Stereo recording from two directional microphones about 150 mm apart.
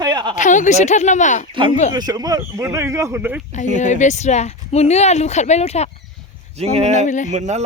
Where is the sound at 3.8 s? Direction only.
55° left (ahead or behind).